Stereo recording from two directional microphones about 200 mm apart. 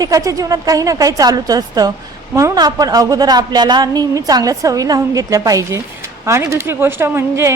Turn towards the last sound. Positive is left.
turn(degrees=-15)  # may be behind; listen again after turning